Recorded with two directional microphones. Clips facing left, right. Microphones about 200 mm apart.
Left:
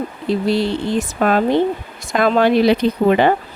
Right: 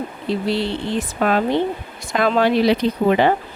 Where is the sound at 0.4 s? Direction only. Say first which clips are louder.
Left 4 dB; 40° left (ahead or behind).